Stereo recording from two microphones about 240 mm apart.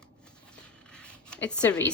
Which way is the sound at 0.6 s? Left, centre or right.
Centre.